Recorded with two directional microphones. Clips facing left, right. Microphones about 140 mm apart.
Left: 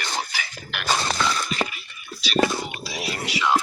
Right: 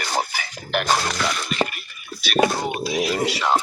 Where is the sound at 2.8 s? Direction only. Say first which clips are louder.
Right 9 dB; 50° right (ahead or behind).